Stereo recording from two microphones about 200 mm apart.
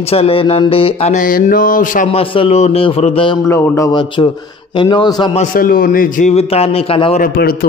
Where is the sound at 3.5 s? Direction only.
15° left (ahead or behind).